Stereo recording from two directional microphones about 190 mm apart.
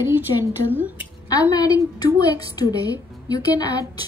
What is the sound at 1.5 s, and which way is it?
A woman's voice, 20° left (ahead or behind).